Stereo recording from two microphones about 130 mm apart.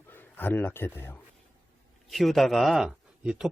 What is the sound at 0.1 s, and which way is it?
A man's voice, 15° left (ahead or behind).